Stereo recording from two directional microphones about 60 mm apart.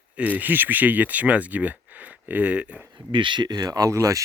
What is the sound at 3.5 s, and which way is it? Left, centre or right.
Speech, right.